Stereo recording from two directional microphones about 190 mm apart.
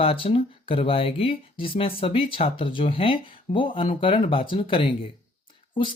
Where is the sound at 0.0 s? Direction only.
30° left (ahead or behind).